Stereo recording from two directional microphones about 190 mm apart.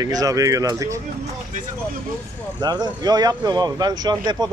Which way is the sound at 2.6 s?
20° right (ahead or behind).